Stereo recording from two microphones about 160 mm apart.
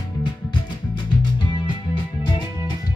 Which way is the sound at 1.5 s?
30° left (ahead or behind).